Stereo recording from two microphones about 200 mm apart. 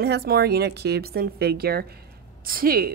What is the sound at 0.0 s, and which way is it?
A woman's voice, 55° right (ahead or behind).